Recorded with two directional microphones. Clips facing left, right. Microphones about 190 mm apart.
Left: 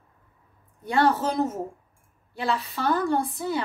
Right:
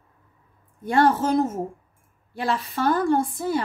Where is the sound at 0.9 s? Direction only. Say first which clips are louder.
Right 3 dB; 50° right (ahead or behind).